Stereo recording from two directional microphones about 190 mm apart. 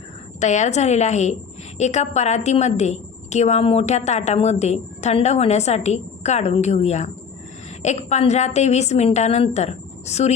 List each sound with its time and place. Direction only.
0.3 s a woman's voice: 40° left (ahead or behind)